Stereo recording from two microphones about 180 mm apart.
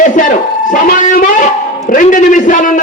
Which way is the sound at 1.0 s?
50° left (ahead or behind).